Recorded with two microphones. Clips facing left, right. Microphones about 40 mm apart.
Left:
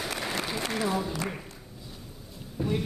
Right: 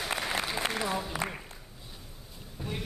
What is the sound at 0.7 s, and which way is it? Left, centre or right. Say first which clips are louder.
Speech: left 3 dB; centre.